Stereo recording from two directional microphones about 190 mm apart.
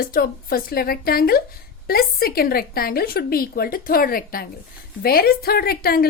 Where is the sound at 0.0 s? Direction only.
50° left (ahead or behind).